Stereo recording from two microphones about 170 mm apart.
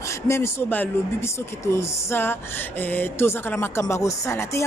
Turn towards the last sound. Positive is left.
turn(degrees=15)  # may be behind; listen again after turning